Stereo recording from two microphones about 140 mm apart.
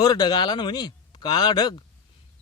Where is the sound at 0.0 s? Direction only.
30° left (ahead or behind).